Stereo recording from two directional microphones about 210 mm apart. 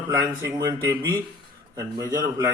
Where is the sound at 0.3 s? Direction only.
15° right (ahead or behind).